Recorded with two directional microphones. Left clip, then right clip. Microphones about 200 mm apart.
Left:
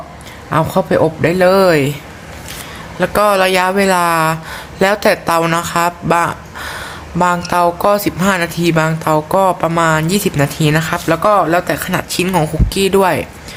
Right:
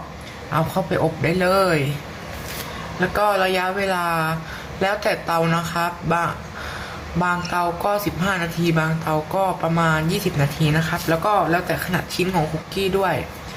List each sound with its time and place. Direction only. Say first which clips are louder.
0.5 s speech: left 8 dB; 45° left (ahead or behind)
3.0 s speech: left 7 dB; 60° left (ahead or behind)